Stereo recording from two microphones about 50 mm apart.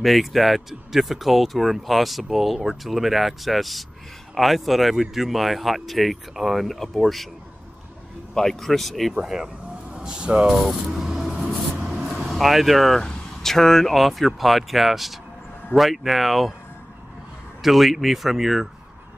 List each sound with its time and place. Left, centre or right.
0.0 s speech: centre
8.4 s speech: centre
9.2 s speech: centre
10.5 s a sound: centre
12.3 s speech: centre
17.6 s speech: centre